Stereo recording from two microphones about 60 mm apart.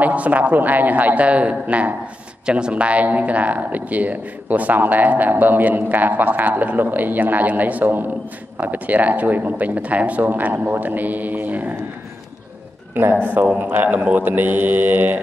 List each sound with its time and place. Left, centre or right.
0.0 s speech: right
13.0 s mantra: right